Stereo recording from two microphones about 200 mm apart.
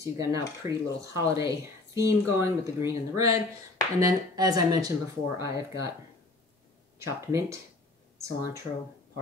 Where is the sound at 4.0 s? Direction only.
20° right (ahead or behind).